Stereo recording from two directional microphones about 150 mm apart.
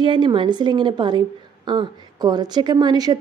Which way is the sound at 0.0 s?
30° right (ahead or behind).